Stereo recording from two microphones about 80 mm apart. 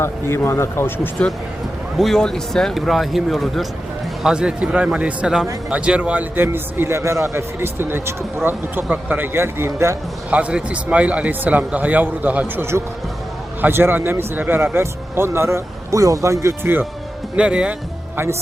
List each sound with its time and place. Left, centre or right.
0.0 s speech: left
2.0 s a man's voice: centre; by 10.0 s right
10.2 s speech: centre; by 16.7 s right
17.3 s a man's voice: centre